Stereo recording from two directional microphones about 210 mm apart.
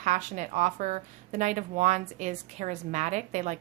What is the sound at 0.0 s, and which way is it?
Speech, 35° right (ahead or behind).